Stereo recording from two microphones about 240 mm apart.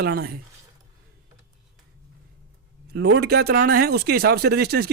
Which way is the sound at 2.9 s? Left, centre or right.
Right.